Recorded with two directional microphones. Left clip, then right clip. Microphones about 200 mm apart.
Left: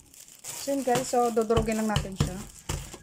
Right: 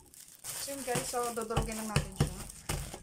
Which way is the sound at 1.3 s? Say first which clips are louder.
Left 11 dB; 45° left (ahead or behind).